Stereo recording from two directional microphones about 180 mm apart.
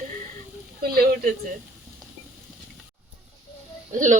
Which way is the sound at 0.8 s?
55° right (ahead or behind).